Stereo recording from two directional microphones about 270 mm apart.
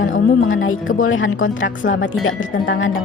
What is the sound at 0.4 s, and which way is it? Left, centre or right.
Speech, left.